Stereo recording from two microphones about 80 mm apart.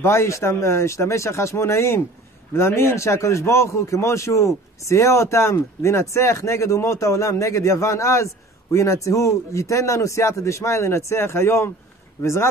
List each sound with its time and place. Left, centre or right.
0.0 s speech: left